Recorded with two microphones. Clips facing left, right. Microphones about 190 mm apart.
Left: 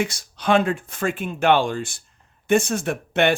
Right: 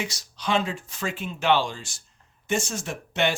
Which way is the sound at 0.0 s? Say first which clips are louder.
Left 7 dB; 55° left (ahead or behind).